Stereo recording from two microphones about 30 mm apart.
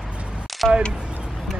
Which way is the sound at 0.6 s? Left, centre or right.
Centre.